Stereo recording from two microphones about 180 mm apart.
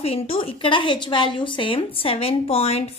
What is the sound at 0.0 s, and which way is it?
A woman's voice, 35° left (ahead or behind).